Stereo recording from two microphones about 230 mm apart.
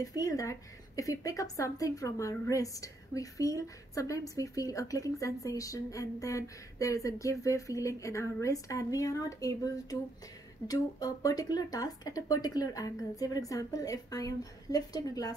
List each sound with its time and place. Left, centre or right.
0.0 s speech: centre